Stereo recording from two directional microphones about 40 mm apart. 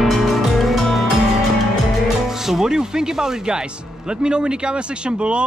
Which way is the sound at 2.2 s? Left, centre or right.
Centre.